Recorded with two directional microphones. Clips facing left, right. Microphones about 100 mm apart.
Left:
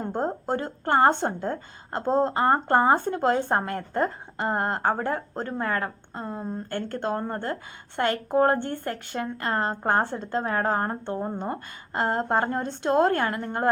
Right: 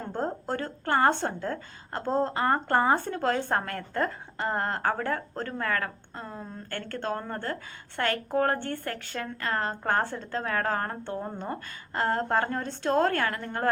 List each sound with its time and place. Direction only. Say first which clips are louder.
0.0 s a woman's voice: left 4 dB; 20° left (ahead or behind)